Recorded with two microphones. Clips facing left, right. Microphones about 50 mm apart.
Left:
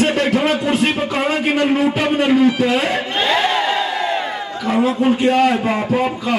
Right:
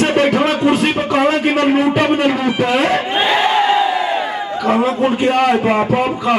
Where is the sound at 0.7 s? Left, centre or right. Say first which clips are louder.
Right 2 dB; centre.